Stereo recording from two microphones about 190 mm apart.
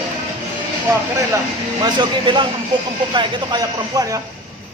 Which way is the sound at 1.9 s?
25° right (ahead or behind).